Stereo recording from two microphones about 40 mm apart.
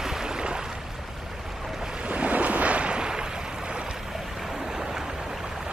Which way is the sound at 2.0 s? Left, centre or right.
Right.